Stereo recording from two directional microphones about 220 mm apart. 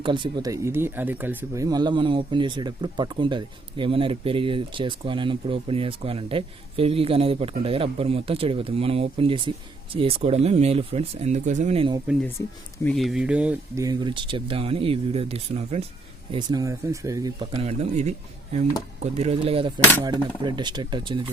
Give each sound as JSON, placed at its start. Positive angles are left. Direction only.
{"t": 0.0, "sound": "speech", "side_deg": -20}
{"t": 12.4, "sound": "speech", "side_deg": 10}
{"t": 12.8, "sound": "speech", "side_deg": 0}
{"t": 19.1, "sound": "speech", "side_deg": -30}